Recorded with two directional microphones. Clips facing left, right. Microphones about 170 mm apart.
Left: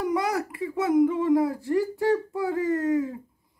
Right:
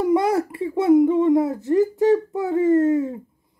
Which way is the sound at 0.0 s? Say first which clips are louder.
Right 7 dB; 25° right (ahead or behind).